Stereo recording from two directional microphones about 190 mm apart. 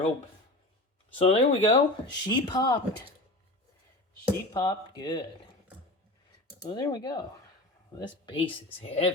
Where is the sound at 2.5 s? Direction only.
20° left (ahead or behind).